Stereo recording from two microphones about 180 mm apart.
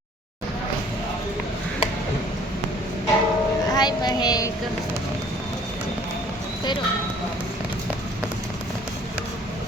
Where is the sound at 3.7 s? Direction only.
20° left (ahead or behind).